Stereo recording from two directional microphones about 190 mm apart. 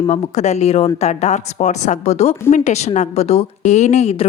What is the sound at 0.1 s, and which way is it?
A woman's voice, 35° left (ahead or behind).